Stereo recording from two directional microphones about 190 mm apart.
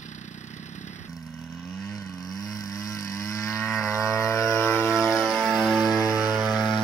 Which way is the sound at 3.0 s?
15° left (ahead or behind).